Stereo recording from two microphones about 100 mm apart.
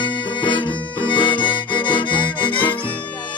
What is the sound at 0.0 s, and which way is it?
Music, 55° left (ahead or behind).